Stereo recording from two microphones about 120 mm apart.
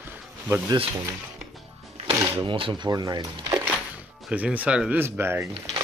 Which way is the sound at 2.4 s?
45° right (ahead or behind).